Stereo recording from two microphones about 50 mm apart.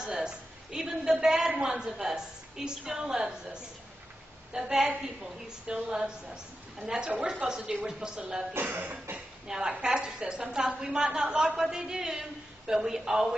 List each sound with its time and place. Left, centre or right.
0.0 s a man's voice: centre
4.6 s a man's voice: centre
8.5 s speech: right
9.5 s a man's voice: centre